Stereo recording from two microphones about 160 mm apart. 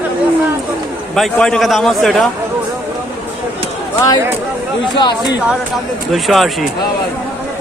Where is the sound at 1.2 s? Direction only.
5° left (ahead or behind).